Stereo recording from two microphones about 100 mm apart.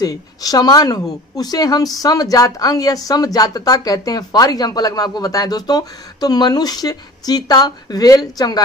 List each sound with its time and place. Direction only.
0.0 s a woman's voice: 40° left (ahead or behind)